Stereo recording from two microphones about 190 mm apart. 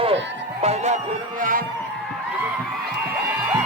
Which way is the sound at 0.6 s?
35° right (ahead or behind).